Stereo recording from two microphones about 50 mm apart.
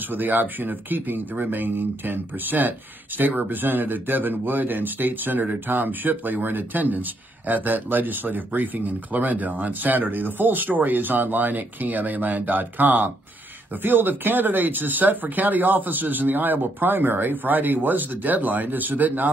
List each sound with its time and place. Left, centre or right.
0.1 s speech: right